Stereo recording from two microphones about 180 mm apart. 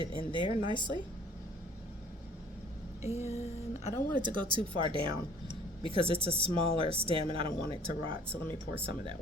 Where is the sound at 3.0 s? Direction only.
35° left (ahead or behind).